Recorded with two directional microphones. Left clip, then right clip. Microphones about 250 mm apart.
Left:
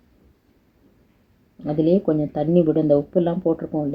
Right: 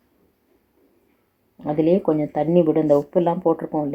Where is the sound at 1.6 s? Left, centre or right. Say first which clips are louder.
Right 1 dB; centre.